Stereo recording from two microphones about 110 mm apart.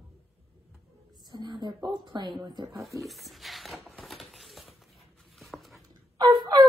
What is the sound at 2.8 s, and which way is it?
Shuffling cards, centre (ahead or behind).